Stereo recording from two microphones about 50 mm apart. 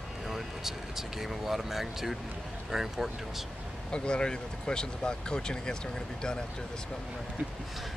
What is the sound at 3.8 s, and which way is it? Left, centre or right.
Speech, centre.